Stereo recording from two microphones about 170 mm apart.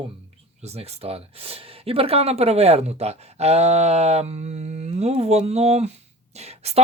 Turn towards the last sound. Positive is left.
turn(degrees=-40)  # may be behind; listen again after turning